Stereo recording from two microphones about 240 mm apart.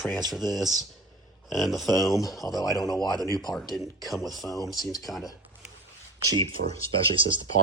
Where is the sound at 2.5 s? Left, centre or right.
Centre.